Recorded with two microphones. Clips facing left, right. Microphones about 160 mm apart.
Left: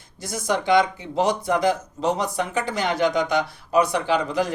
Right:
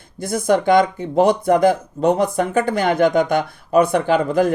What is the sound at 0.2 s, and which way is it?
Speech, 55° right (ahead or behind).